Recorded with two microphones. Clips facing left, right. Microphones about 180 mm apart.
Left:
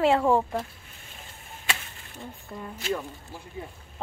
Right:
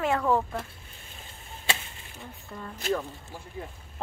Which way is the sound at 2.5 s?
15° left (ahead or behind).